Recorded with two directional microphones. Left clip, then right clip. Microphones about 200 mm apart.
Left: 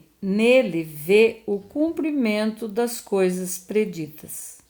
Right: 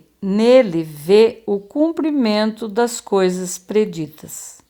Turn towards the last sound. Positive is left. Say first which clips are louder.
# right 5 dB
turn(degrees=-20)  # may be behind; listen again after turning